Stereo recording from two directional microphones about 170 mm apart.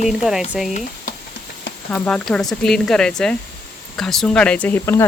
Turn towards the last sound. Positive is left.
turn(degrees=15)  # may be behind; listen again after turning